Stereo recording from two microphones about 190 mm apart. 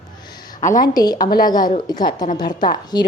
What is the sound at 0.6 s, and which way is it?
A woman's voice, 40° left (ahead or behind).